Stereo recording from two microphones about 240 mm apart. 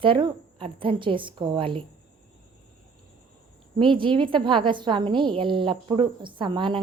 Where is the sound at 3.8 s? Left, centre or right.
Right.